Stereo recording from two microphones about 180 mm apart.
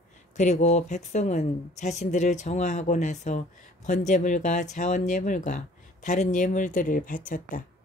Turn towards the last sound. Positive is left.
turn(degrees=50)  # may be behind; listen again after turning